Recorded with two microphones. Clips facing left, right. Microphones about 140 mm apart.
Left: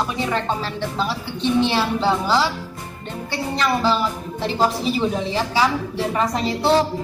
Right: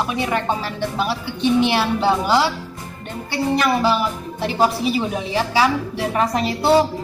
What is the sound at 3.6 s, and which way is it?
A woman's voice, 15° right (ahead or behind).